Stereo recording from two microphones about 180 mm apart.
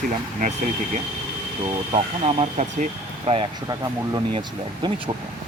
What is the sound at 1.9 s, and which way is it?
Speech, 35° right (ahead or behind).